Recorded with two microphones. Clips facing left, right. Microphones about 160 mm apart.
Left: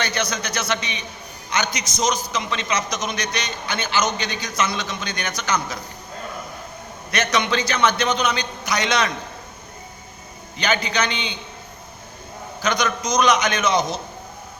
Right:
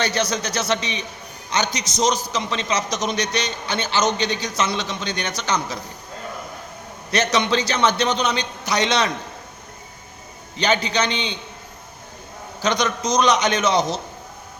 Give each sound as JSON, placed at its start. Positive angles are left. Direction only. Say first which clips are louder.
{"t": 0.0, "sound": "a man's voice", "louder": "right 3 dB", "side_deg": -35}
{"t": 7.1, "sound": "a man's voice", "louder": "right 2 dB", "side_deg": -35}
{"t": 10.6, "sound": "a man's voice", "louder": "right 2 dB", "side_deg": -30}
{"t": 12.6, "sound": "a man's voice", "louder": "right 1 dB", "side_deg": -35}